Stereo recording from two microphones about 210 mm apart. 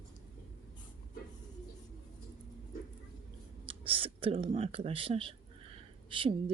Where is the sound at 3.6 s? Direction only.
25° right (ahead or behind).